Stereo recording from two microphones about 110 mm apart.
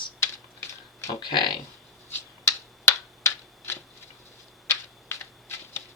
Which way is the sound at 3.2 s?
20° left (ahead or behind).